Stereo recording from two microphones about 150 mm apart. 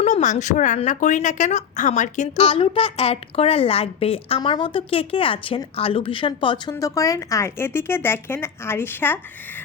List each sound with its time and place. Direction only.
0.0 s a woman's voice: 50° left (ahead or behind); by 9.1 s 15° left (ahead or behind)